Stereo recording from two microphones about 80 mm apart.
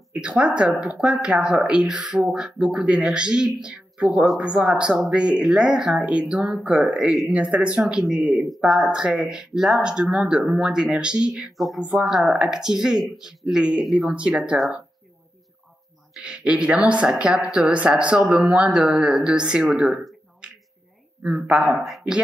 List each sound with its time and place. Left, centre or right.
0.1 s speech: centre
7.1 s speech: centre
7.3 s speech: centre
11.5 s speech: centre
16.2 s speech: centre
20.4 s finger snapping: centre
21.2 s speech: centre
21.8 s speech: centre